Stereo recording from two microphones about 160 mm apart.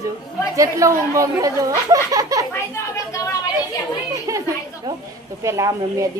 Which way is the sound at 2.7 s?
20° left (ahead or behind).